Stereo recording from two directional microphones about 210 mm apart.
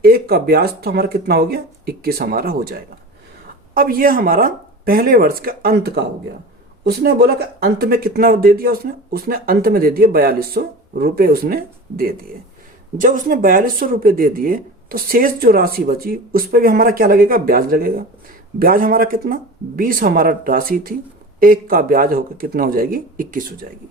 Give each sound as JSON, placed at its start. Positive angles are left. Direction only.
{"t": 0.0, "sound": "speech", "side_deg": -45}